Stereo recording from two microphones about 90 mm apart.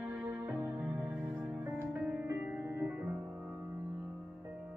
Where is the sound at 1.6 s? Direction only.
25° right (ahead or behind).